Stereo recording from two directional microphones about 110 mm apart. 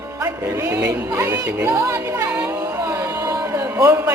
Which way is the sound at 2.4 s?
25° right (ahead or behind).